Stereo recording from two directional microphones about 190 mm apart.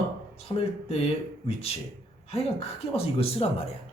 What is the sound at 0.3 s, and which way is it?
Speech, 30° left (ahead or behind).